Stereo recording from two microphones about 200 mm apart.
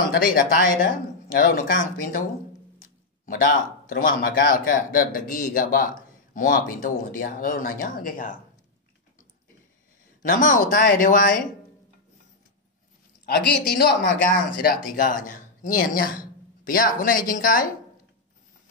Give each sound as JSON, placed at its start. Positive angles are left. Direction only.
{"t": 0.1, "sound": "a man's voice", "side_deg": 45}
{"t": 3.3, "sound": "a man's voice", "side_deg": 45}
{"t": 10.2, "sound": "a man's voice", "side_deg": 45}
{"t": 13.2, "sound": "a man's voice", "side_deg": 55}
{"t": 14.6, "sound": "a man's voice", "side_deg": 40}